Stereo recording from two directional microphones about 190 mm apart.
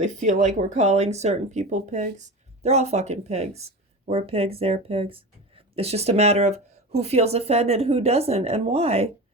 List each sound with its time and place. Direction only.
0.0 s speech: 40° right (ahead or behind)